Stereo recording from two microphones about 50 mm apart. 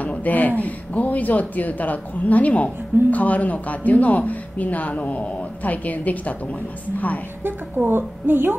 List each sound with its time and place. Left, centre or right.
0.0 s a sound: left
0.6 s a woman's voice: left
7.4 s a woman's voice: right